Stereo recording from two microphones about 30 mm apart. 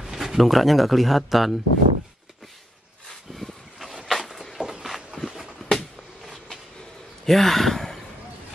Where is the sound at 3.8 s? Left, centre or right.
Centre.